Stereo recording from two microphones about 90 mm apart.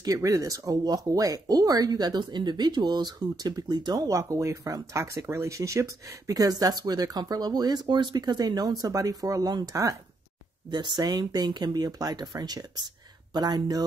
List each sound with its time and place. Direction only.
0.0 s speech: 40° right (ahead or behind)
10.7 s speech: 55° right (ahead or behind)